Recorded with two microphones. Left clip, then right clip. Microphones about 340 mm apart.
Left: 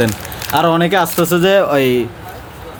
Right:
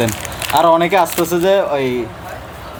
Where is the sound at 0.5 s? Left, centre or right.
Left.